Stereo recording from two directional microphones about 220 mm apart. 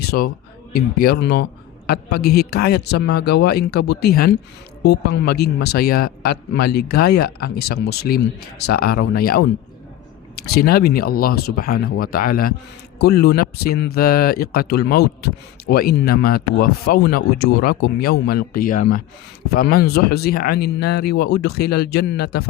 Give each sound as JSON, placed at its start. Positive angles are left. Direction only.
{"t": 0.0, "sound": "music", "side_deg": 45}
{"t": 0.7, "sound": "speech", "side_deg": 45}